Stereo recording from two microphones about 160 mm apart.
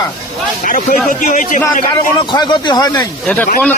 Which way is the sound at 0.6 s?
60° left (ahead or behind).